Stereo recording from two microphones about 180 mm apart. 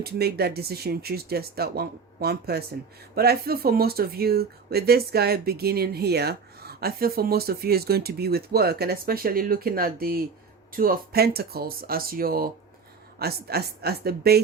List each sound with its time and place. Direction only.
0.0 s speech: 60° right (ahead or behind)